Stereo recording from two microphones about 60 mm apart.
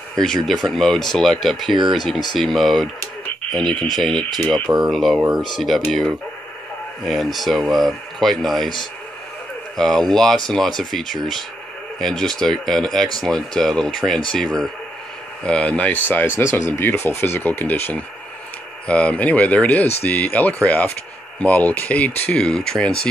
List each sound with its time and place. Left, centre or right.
0.1 s speech: centre; by 16.3 s left
16.3 s speech: left
18.9 s speech: left
22.4 s speech: centre